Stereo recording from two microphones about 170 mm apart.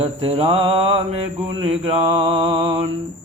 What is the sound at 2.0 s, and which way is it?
Mantra, 35° right (ahead or behind).